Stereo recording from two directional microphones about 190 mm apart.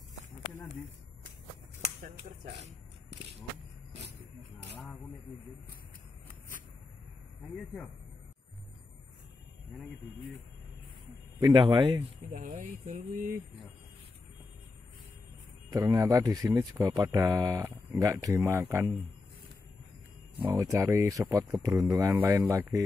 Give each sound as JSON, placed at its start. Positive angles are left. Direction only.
{"t": 2.0, "sound": "speech", "side_deg": -40}
{"t": 11.3, "sound": "a man's voice", "side_deg": -20}
{"t": 12.3, "sound": "speech", "side_deg": -40}
{"t": 15.7, "sound": "speech", "side_deg": -20}
{"t": 20.3, "sound": "speech", "side_deg": -20}